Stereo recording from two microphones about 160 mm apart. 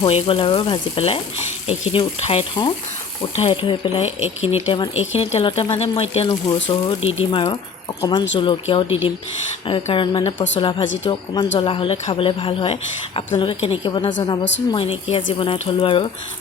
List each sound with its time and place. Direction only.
0.0 s a woman's voice: 35° left (ahead or behind)